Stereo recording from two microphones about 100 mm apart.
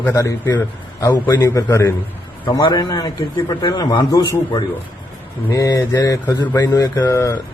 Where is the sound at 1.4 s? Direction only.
30° left (ahead or behind).